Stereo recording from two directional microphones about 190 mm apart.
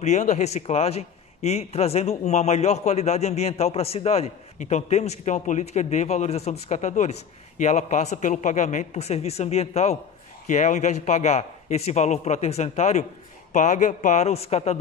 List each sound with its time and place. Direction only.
0.0 s a man's voice: 35° left (ahead or behind)